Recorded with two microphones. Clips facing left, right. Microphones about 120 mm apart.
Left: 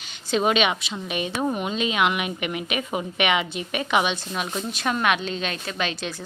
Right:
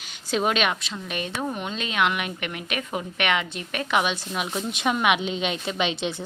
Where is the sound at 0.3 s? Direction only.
Centre (ahead or behind).